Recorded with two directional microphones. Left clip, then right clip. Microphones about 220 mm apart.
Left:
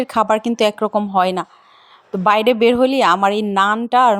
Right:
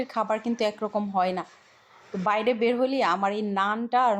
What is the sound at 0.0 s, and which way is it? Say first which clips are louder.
A woman's voice: left 11 dB; 45° left (ahead or behind).